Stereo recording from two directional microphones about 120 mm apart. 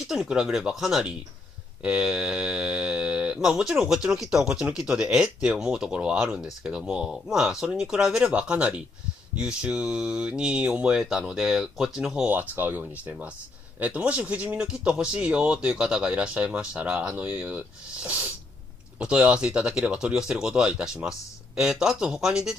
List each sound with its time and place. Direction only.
0.0 s speech: 5° right (ahead or behind)
12.3 s speech: 15° right (ahead or behind)